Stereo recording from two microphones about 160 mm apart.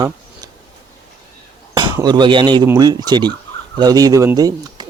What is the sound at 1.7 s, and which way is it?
Speech, 25° right (ahead or behind).